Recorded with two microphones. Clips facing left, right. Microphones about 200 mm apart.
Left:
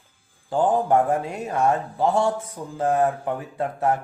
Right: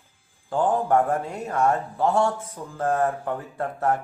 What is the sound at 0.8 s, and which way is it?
Speech, 15° left (ahead or behind).